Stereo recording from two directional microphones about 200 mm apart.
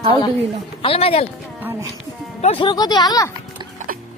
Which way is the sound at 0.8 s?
30° left (ahead or behind).